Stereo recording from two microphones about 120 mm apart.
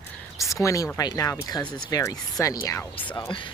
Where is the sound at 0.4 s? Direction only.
25° left (ahead or behind).